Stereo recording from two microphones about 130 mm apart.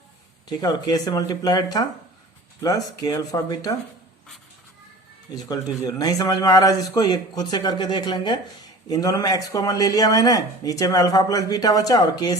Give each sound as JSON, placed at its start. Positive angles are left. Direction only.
{"t": 0.4, "sound": "a man's voice", "side_deg": 30}
{"t": 5.3, "sound": "a man's voice", "side_deg": 30}